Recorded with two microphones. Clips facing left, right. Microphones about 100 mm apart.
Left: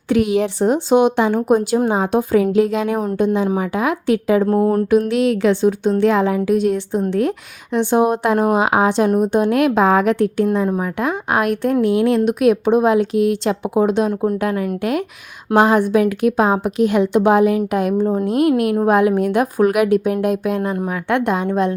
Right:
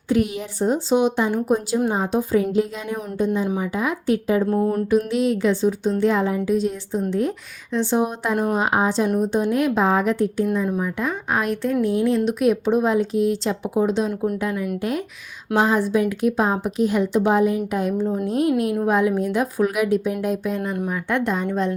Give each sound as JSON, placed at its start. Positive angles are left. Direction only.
{"t": 0.1, "sound": "a woman's voice", "side_deg": 90}
{"t": 1.9, "sound": "a woman's voice", "side_deg": 75}
{"t": 4.4, "sound": "a sound", "side_deg": 50}
{"t": 4.9, "sound": "a woman's voice", "side_deg": 70}
{"t": 8.5, "sound": "speech", "side_deg": 90}
{"t": 9.0, "sound": "a woman's voice", "side_deg": 55}